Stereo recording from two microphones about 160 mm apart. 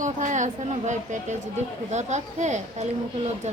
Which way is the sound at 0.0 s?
50° right (ahead or behind).